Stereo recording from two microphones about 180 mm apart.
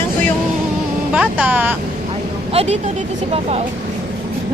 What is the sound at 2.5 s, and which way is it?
Speech, 35° right (ahead or behind).